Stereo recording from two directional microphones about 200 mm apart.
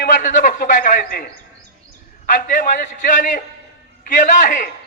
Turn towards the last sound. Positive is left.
turn(degrees=40)  # may be behind; listen again after turning